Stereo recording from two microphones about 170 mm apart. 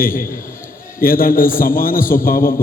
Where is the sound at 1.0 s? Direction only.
55° left (ahead or behind).